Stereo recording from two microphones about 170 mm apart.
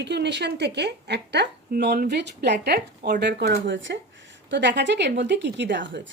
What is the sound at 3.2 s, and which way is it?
A woman's voice, 85° right.